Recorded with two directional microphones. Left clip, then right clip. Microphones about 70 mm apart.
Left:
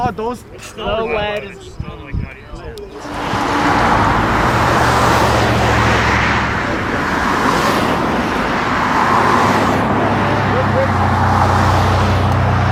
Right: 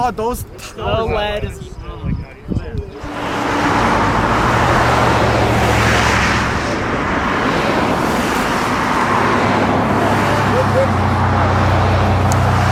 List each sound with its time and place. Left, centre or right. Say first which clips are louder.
0.0 s speech: right 1 dB; right
3.2 s vehicle: left 1 dB; left
4.2 s vehicle: even; right
4.9 s vehicle: left 1 dB; left
5.8 s vehicle: even; right
6.8 s vehicle: left 1 dB; left
8.0 s vehicle: even; right
8.8 s vehicle: left 4 dB; left
9.9 s vehicle: even; right
10.9 s vehicle: left 2 dB; left
12.3 s vehicle: right 1 dB; right